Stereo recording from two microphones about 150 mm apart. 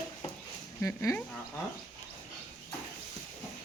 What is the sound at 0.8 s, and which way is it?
Speech, 20° left (ahead or behind).